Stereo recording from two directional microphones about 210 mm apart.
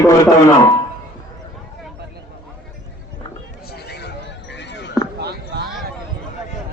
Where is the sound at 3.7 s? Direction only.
50° left (ahead or behind).